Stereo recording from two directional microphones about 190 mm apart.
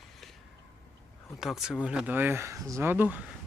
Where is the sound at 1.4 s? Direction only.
Centre (ahead or behind).